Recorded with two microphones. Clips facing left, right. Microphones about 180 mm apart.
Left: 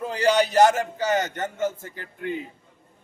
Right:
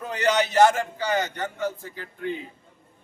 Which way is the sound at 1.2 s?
45° left (ahead or behind).